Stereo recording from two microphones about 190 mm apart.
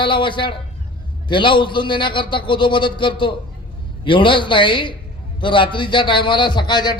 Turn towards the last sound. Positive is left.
turn(degrees=25)  # may be behind; listen again after turning